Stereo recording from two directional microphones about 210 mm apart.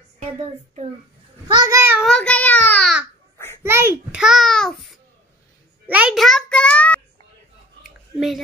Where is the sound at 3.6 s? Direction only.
10° right (ahead or behind).